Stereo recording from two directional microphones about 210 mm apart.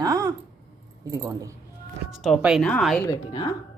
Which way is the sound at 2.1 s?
Centre (ahead or behind).